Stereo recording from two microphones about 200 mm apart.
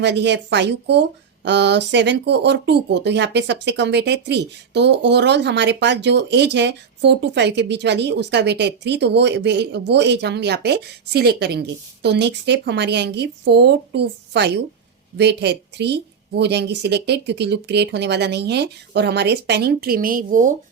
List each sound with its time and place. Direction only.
0.0 s speech: 60° right (ahead or behind); by 20.5 s 40° right (ahead or behind)